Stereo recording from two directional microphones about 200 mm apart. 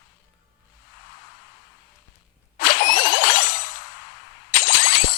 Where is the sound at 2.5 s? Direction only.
45° left (ahead or behind).